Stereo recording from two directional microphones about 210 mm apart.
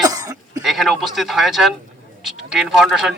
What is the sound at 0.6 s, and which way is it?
A man's voice, centre (ahead or behind).